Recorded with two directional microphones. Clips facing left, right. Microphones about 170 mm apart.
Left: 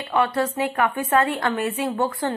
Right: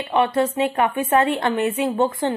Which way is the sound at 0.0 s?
20° right (ahead or behind).